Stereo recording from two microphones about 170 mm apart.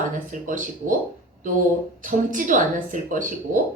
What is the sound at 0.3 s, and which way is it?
Speech, 50° right (ahead or behind).